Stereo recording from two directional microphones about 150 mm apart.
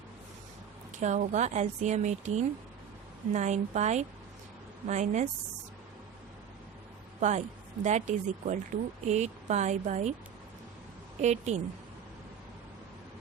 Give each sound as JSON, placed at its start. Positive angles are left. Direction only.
{"t": 0.9, "sound": "speech", "side_deg": -55}
{"t": 7.2, "sound": "speech", "side_deg": -50}
{"t": 11.2, "sound": "speech", "side_deg": -50}